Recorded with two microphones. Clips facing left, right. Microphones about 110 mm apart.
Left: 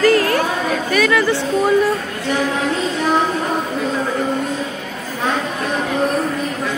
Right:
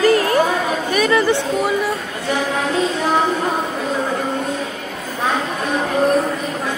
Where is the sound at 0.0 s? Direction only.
15° right (ahead or behind).